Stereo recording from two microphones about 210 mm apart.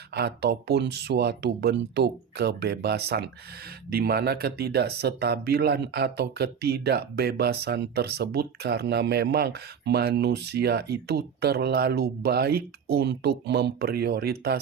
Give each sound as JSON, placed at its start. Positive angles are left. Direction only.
{"t": 0.1, "sound": "speech", "side_deg": -50}